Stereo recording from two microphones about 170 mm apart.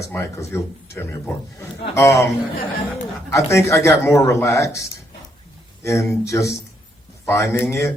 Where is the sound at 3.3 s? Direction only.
15° left (ahead or behind).